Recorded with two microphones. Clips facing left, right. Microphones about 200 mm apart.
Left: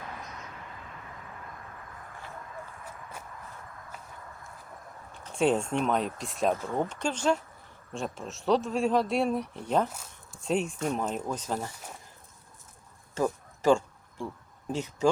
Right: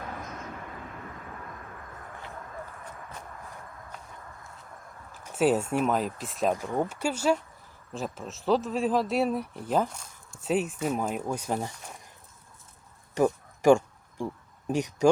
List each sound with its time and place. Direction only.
3.9 s walk: 5° left (ahead or behind)
5.1 s speech: 5° right (ahead or behind)
6.5 s speech: 15° right (ahead or behind)
9.9 s a sound: 5° left (ahead or behind)
10.4 s speech: 5° right (ahead or behind)
13.1 s a sound: 15° right (ahead or behind)
14.7 s speech: 15° right (ahead or behind)